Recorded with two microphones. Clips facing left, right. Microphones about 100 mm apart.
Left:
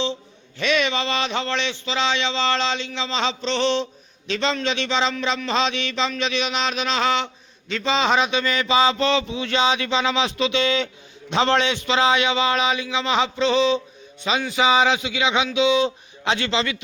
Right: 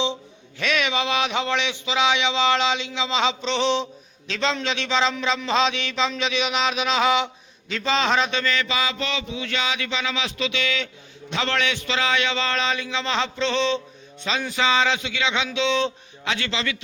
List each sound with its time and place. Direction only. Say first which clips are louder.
0.6 s speech: left 2 dB; centre (ahead or behind)
4.3 s mantra: left 2 dB; centre (ahead or behind)
7.7 s a man's voice: left 2 dB; centre (ahead or behind)
16.2 s speech: left 4 dB; 25° left (ahead or behind)